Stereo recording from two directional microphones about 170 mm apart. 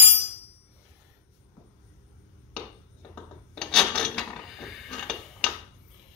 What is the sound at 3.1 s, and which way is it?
Filing, 5° left (ahead or behind).